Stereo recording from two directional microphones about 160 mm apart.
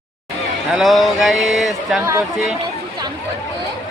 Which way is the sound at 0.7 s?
Centre (ahead or behind).